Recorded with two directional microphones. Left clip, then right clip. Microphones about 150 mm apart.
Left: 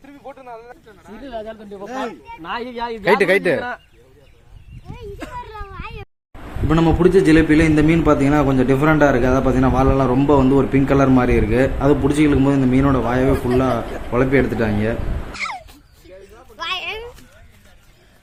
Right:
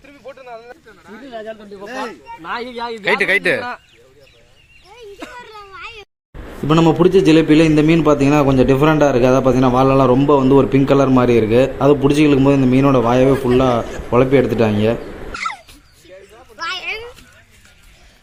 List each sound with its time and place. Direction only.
0.3 s a sound: 55° left (ahead or behind)
0.9 s speech: 35° left (ahead or behind)
1.3 s speech: 5° left (ahead or behind)
2.4 s speech: 15° left (ahead or behind)
5.3 s children playing: 15° right (ahead or behind)
6.7 s a man's voice: 10° right (ahead or behind)
15.3 s dog: 60° left (ahead or behind)
16.8 s a sound: 75° left (ahead or behind)